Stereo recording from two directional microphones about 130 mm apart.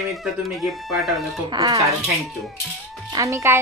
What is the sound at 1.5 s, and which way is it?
Speech, 25° right (ahead or behind).